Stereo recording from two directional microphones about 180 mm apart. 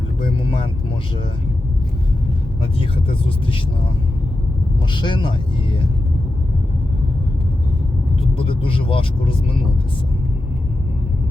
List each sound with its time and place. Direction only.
0.2 s speech: 30° left (ahead or behind)
2.7 s speech: 30° left (ahead or behind)
4.9 s speech: 25° left (ahead or behind)
8.4 s speech: 30° left (ahead or behind)